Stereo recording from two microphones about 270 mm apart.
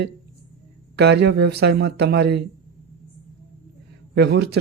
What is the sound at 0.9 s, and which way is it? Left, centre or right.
Speech, right.